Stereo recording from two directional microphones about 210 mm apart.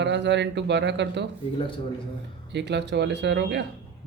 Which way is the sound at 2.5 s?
55° right (ahead or behind).